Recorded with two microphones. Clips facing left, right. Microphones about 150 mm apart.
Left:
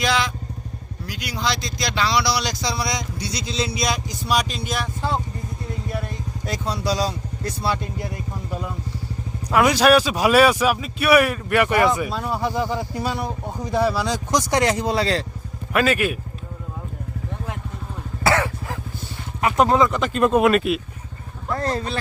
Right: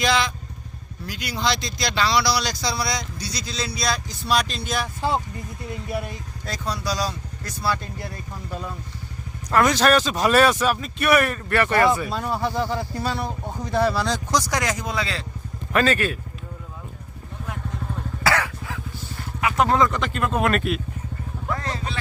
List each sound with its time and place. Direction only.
0.0 s vehicle: 10° left (ahead or behind)
1.0 s speech: 10° left (ahead or behind)
6.4 s speech: 20° left (ahead or behind)
12.1 s speech: centre (ahead or behind)
12.4 s speech: 10° left (ahead or behind)
14.3 s speech: 20° left (ahead or behind)
15.7 s speech: 10° left (ahead or behind)
18.2 s cough: 25° left (ahead or behind)
19.5 s speech: 20° left (ahead or behind)
20.4 s speech: 5° left (ahead or behind)
21.5 s vehicle: 40° left (ahead or behind)